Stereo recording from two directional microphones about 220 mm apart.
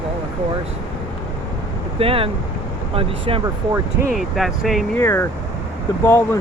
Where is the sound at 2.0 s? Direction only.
25° right (ahead or behind).